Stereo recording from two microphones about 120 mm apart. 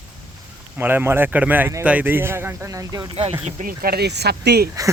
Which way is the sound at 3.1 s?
50° right (ahead or behind).